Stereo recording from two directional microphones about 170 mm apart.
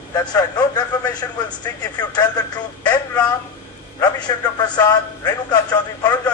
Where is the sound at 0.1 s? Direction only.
25° left (ahead or behind).